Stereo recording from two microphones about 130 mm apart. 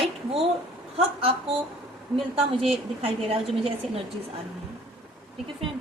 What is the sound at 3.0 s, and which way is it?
Speech, 50° right (ahead or behind).